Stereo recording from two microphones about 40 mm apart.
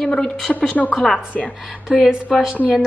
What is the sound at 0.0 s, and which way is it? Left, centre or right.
Speech, centre.